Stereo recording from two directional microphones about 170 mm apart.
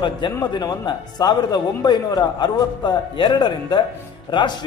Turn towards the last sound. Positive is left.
turn(degrees=30)  # may be behind; listen again after turning